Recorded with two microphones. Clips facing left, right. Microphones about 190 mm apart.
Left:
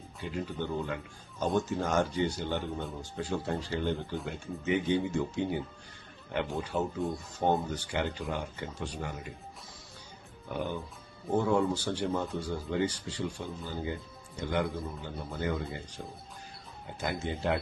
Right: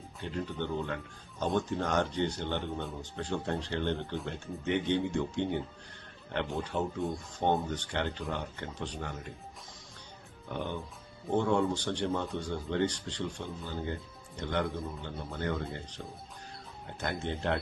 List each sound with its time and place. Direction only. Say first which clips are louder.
0.2 s speech: even; 5° left (ahead or behind)
10.5 s speech: left 2 dB; 5° left (ahead or behind)